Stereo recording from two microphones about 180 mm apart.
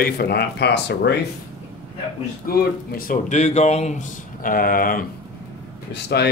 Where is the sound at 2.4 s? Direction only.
55° left (ahead or behind).